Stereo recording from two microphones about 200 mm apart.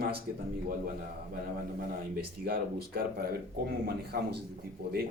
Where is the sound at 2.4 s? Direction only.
50° right (ahead or behind).